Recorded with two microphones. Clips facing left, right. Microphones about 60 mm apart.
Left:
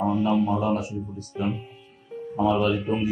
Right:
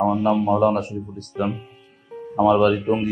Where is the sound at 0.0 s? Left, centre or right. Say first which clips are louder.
Right 3 dB; right.